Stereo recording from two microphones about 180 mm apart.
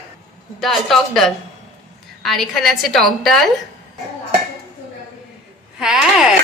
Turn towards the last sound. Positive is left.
turn(degrees=-5)  # may be behind; listen again after turning